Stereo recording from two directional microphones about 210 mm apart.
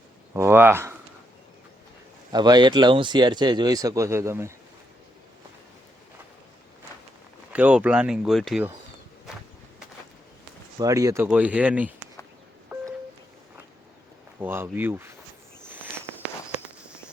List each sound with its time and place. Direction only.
0.3 s speech: 10° right (ahead or behind)
2.3 s speech: 20° right (ahead or behind)
7.5 s speech: 5° right (ahead or behind)
10.8 s speech: 15° right (ahead or behind)
12.7 s a sound: 10° right (ahead or behind)
14.3 s speech: 10° right (ahead or behind)